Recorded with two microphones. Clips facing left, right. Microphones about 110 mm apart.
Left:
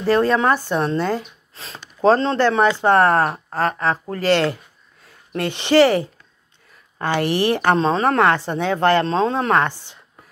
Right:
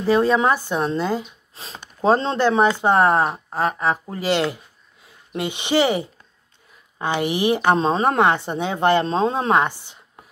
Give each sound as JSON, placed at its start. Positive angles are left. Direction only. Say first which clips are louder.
{"t": 0.0, "sound": "a woman's voice", "louder": "even", "side_deg": -5}
{"t": 7.7, "sound": "speech", "louder": "left 1 dB", "side_deg": -20}